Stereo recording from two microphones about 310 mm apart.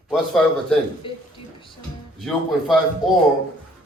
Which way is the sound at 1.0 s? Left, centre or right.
Centre.